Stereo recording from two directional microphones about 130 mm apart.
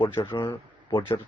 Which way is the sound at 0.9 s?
35° left (ahead or behind).